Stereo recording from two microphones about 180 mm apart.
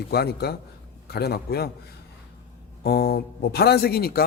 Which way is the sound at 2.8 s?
60° left (ahead or behind).